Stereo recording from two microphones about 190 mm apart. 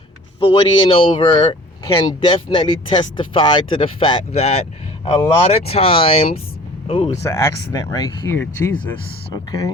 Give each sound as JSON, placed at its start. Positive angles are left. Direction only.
{"t": 0.3, "sound": "speech", "side_deg": 25}
{"t": 7.2, "sound": "speech", "side_deg": 15}
{"t": 9.3, "sound": "speech", "side_deg": 20}